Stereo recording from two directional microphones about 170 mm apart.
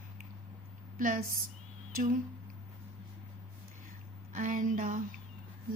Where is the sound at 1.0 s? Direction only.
50° right (ahead or behind).